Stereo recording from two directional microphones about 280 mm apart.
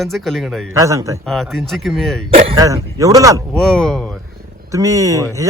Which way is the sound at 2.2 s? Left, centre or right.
Centre.